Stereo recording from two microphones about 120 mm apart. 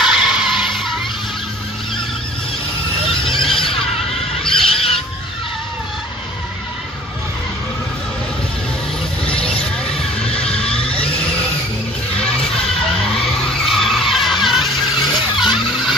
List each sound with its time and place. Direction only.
0.0 s music: 5° right (ahead or behind)
4.4 s wild animals: 50° left (ahead or behind)
9.2 s vehicle: 10° left (ahead or behind)
10.3 s music: 55° left (ahead or behind)
13.4 s vehicle: centre (ahead or behind)
15.0 s a sound: 40° left (ahead or behind)